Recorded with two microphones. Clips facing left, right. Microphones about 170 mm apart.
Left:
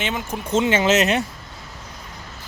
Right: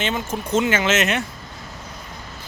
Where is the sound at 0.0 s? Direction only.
15° left (ahead or behind).